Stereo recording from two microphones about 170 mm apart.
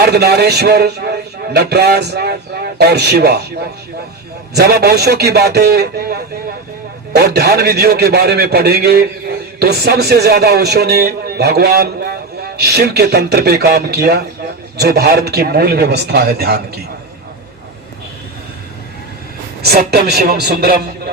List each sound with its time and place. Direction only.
0.0 s speech: 70° right (ahead or behind)
19.6 s speech: 65° right (ahead or behind)